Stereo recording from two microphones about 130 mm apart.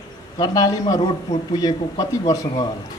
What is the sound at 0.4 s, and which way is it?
A man's voice, 30° left (ahead or behind).